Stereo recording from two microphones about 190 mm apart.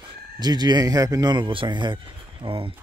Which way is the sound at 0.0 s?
20° right (ahead or behind).